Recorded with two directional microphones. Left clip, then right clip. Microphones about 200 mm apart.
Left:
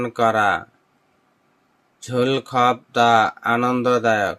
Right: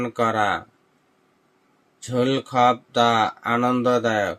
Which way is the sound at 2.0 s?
15° left (ahead or behind).